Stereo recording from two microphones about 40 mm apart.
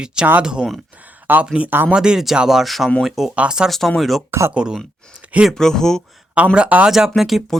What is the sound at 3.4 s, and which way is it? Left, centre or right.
Speech, right.